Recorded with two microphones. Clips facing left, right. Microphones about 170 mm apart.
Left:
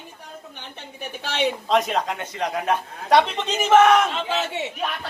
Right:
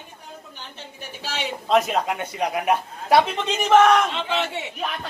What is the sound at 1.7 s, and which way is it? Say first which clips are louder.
A man's voice: right 6 dB; 5° right (ahead or behind).